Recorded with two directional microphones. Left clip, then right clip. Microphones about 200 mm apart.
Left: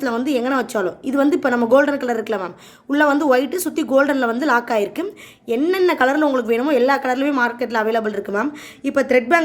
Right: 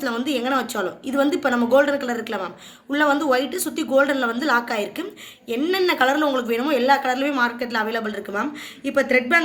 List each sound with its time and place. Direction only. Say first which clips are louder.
0.0 s a woman's voice: left 4 dB; 55° left (ahead or behind)